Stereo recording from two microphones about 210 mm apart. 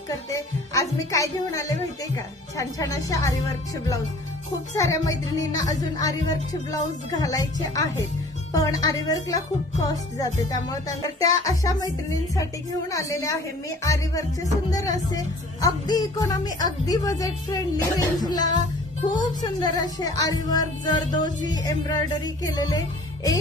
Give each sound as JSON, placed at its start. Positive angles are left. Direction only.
{"t": 0.3, "sound": "speech", "side_deg": 15}
{"t": 4.7, "sound": "speech", "side_deg": 15}
{"t": 18.4, "sound": "music", "side_deg": -35}
{"t": 19.4, "sound": "speech", "side_deg": 20}